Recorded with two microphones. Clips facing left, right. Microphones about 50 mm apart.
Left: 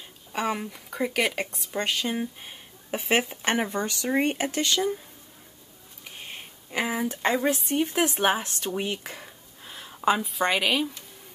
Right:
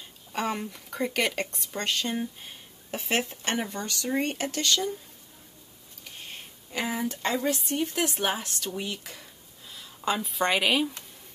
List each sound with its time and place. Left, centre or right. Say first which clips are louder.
0.3 s speech: left 2 dB; centre
6.0 s a sound: left 2 dB; centre
7.2 s speech: left 5 dB; left
10.2 s a woman's voice: even; centre